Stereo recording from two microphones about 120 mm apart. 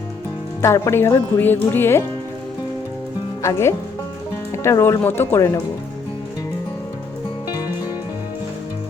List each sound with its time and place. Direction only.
0.6 s speech: 20° left (ahead or behind)
3.4 s speech: 25° left (ahead or behind)